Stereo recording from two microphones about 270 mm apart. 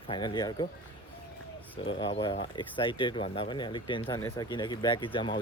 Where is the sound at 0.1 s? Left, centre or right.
Centre.